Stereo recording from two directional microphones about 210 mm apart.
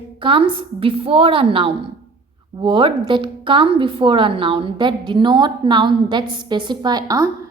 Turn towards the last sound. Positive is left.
turn(degrees=-15)  # may be behind; listen again after turning